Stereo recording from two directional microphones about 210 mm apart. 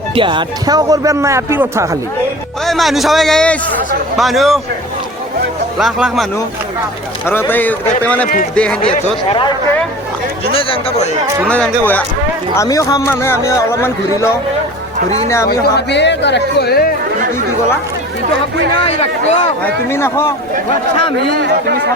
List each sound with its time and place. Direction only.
0.1 s speech: 25° right (ahead or behind)
2.6 s a man's voice: centre (ahead or behind)
5.8 s a man's voice: centre (ahead or behind)
7.3 s a man's voice: 10° left (ahead or behind)
8.8 s speech: 25° left (ahead or behind)
10.5 s speech: 25° left (ahead or behind)
11.4 s a man's voice: 5° left (ahead or behind)
15.4 s speech: 50° left (ahead or behind)
18.8 s speech: 30° left (ahead or behind)
19.6 s speech: 10° left (ahead or behind)